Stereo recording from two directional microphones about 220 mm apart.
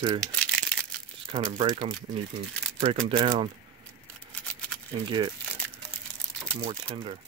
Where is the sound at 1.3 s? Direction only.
20° right (ahead or behind).